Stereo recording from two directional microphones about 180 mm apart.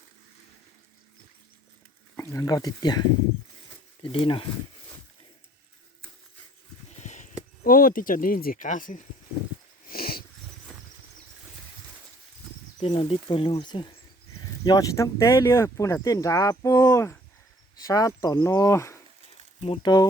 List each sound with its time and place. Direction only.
2.1 s speech: 15° left (ahead or behind)
4.0 s speech: 30° left (ahead or behind)
7.0 s a sound: 40° left (ahead or behind)
7.6 s speech: 50° left (ahead or behind)
9.8 s dog: 55° left (ahead or behind)
12.8 s speech: 35° left (ahead or behind); by 18.9 s 15° left (ahead or behind)
19.6 s speech: 25° left (ahead or behind)